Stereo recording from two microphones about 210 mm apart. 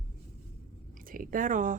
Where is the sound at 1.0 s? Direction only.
40° right (ahead or behind).